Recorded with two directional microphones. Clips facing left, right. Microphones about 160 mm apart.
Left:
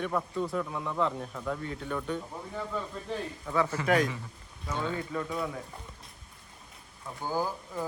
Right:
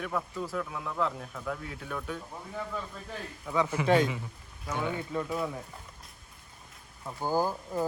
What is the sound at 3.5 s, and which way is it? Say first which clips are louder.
Speech: right 1 dB; 15° right (ahead or behind).